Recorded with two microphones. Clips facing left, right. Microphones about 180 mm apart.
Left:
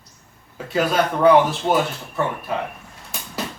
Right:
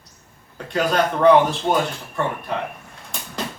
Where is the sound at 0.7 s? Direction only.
5° left (ahead or behind).